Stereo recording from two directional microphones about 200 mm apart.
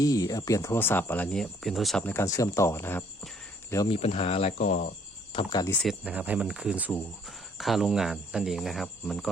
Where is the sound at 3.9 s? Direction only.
30° left (ahead or behind).